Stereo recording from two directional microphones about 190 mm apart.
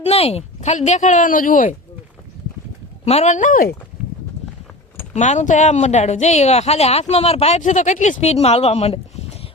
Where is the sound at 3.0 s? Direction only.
35° left (ahead or behind).